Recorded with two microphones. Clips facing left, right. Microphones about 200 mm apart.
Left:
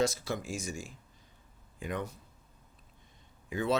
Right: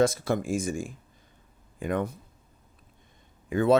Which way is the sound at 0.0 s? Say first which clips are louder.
Right 7 dB; 55° right (ahead or behind).